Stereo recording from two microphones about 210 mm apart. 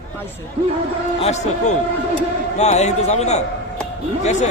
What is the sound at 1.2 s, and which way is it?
Speech, 30° left (ahead or behind).